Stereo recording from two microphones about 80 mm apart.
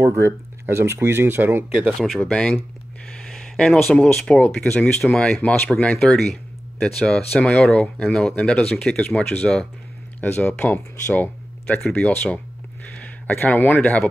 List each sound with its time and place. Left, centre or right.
0.0 s speech: right
1.7 s speech: centre
2.0 s speech: centre; by 14.0 s left